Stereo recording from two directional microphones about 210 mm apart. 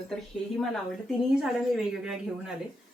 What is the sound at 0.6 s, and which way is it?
A woman's voice, centre (ahead or behind).